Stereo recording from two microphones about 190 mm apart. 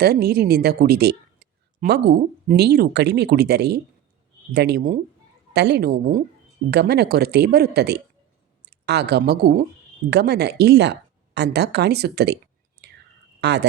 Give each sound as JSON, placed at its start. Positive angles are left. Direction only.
{"t": 0.0, "sound": "speech", "side_deg": -55}
{"t": 12.8, "sound": "whispering", "side_deg": -60}
{"t": 13.4, "sound": "speech", "side_deg": -65}